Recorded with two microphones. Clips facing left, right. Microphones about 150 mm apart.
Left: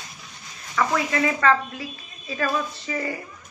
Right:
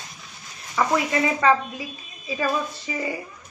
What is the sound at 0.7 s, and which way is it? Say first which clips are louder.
A woman's voice: right 1 dB; 20° right (ahead or behind).